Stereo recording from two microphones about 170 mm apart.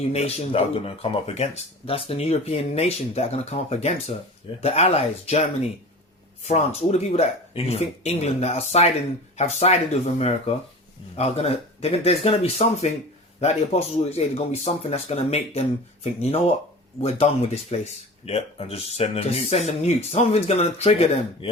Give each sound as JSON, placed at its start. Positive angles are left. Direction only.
{"t": 0.1, "sound": "speech", "side_deg": 40}
{"t": 17.0, "sound": "speech", "side_deg": 35}